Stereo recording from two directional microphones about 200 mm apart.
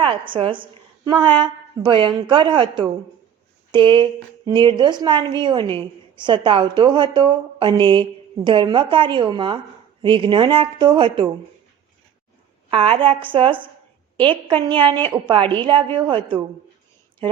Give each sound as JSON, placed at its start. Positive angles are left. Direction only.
{"t": 0.0, "sound": "a woman's voice", "side_deg": -25}
{"t": 12.7, "sound": "a woman's voice", "side_deg": -25}